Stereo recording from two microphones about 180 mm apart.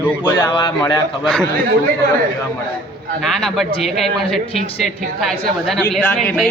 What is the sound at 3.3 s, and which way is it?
A woman's voice, centre (ahead or behind).